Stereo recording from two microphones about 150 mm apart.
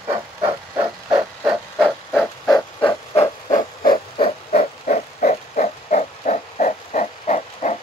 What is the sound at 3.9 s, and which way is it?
Pig, 40° left (ahead or behind).